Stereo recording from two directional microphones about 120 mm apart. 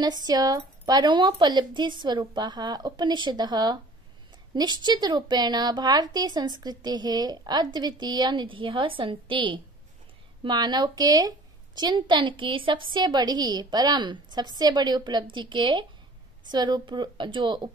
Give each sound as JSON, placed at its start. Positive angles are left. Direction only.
{"t": 0.0, "sound": "a woman's voice", "side_deg": -35}